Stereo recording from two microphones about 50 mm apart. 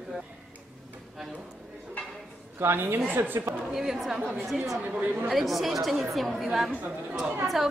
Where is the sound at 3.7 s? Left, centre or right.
Centre.